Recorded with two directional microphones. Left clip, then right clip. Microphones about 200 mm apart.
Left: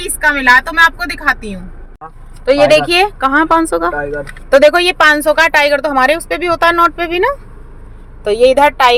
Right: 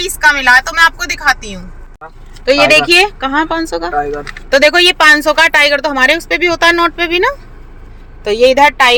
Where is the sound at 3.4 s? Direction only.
15° left (ahead or behind).